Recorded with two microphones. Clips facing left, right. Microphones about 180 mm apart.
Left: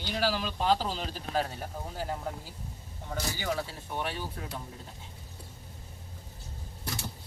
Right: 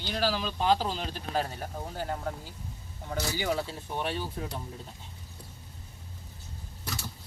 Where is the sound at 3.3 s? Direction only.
15° right (ahead or behind).